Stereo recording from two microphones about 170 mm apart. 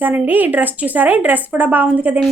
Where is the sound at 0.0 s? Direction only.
10° right (ahead or behind).